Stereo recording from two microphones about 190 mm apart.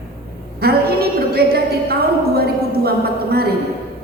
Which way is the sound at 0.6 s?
55° right (ahead or behind).